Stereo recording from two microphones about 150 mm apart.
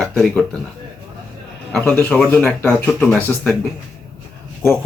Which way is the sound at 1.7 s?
10° left (ahead or behind).